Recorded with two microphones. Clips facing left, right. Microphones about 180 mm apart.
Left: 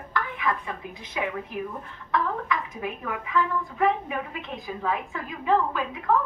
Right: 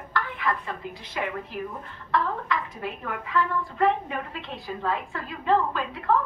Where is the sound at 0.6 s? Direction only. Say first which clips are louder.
Right 1 dB; 15° left (ahead or behind).